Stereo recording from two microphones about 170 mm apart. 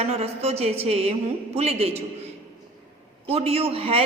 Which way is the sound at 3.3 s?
35° right (ahead or behind).